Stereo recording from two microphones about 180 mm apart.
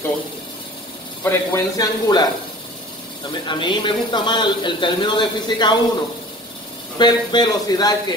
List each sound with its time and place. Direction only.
1.2 s a man's voice: 20° left (ahead or behind)
3.4 s a man's voice: 25° left (ahead or behind)
7.0 s a man's voice: 25° left (ahead or behind)